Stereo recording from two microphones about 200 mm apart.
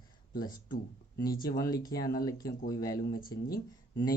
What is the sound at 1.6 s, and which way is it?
Speech, 20° left (ahead or behind).